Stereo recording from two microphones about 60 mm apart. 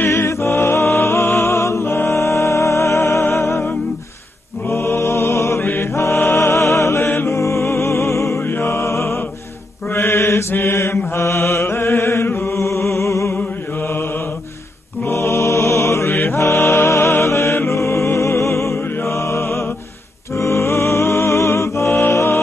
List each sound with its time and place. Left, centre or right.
0.1 s music: left
4.6 s mantra: left
5.6 s mantra: left
5.9 s music: left
9.9 s mantra: left
11.1 s music: left
15.0 s music: left
16.1 s music: left